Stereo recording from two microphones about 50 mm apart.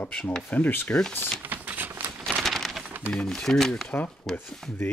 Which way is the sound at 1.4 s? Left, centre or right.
Right.